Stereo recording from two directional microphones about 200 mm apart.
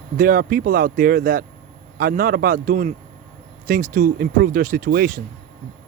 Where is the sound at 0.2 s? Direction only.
45° right (ahead or behind).